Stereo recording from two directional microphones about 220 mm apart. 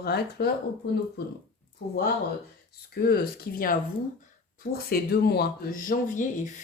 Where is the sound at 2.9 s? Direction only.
45° left (ahead or behind).